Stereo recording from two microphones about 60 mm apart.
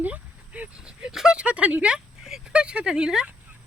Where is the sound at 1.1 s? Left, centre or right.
Centre.